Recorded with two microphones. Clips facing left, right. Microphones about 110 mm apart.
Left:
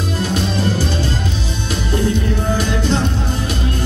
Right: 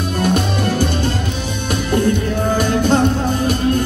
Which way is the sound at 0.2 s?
55° right (ahead or behind).